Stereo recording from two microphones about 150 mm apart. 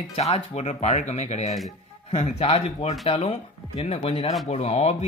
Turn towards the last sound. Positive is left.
turn(degrees=45)  # may be behind; listen again after turning